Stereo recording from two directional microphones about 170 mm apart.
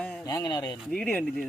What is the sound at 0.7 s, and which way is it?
Speech, centre (ahead or behind).